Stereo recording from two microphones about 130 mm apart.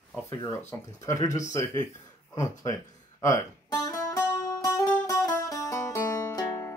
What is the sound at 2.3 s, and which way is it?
Speech, 25° left (ahead or behind).